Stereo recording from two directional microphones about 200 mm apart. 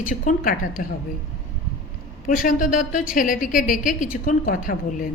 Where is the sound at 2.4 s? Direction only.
40° left (ahead or behind).